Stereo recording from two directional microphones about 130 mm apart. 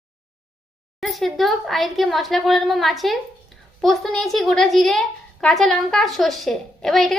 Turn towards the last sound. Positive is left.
turn(degrees=0)  # may be behind; listen again after turning